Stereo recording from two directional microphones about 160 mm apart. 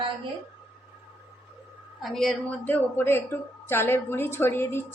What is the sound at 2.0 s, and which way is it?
A woman's voice, centre (ahead or behind).